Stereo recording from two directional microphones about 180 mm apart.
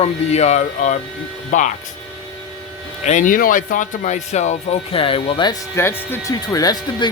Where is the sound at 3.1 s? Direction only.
45° left (ahead or behind); by 5.5 s 25° left (ahead or behind).